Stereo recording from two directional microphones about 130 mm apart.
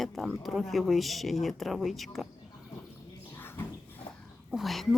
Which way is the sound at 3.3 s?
15° left (ahead or behind).